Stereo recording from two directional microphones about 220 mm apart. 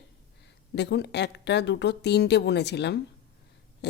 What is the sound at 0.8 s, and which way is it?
A woman's voice, 50° left (ahead or behind).